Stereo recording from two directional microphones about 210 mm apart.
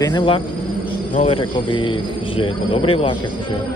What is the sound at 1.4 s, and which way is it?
A man's voice, 25° left (ahead or behind).